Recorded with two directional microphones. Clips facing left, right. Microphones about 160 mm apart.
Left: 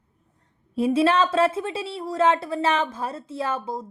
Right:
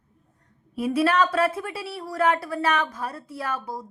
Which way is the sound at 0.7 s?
25° left (ahead or behind).